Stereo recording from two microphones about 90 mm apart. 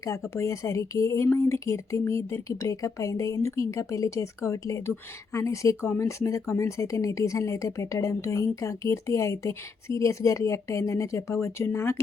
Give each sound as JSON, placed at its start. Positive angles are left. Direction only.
{"t": 0.3, "sound": "speech", "side_deg": 35}